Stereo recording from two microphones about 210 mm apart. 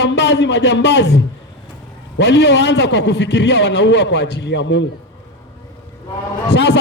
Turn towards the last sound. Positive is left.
turn(degrees=55)  # may be behind; listen again after turning